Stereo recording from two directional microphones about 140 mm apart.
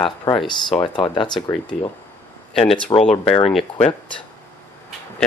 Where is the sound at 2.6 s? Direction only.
40° left (ahead or behind).